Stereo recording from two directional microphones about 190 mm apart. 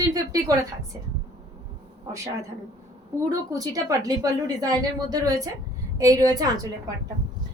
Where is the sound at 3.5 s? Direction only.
20° right (ahead or behind).